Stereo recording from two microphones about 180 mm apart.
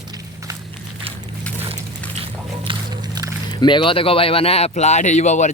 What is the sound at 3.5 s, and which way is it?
Speech, 25° left (ahead or behind).